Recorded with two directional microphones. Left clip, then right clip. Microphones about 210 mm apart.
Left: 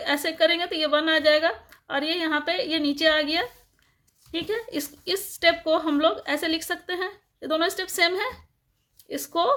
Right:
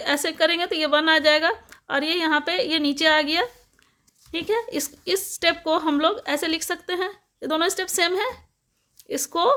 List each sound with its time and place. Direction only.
0.0 s a woman's voice: 25° right (ahead or behind)